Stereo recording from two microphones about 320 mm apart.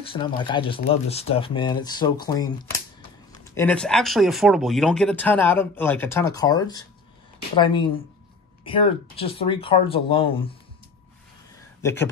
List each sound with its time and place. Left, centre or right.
0.0 s speech: centre
3.5 s speech: centre
11.8 s speech: centre